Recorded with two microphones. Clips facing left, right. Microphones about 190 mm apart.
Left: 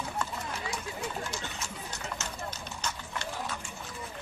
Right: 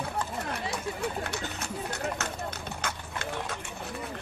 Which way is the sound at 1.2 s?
60° right (ahead or behind).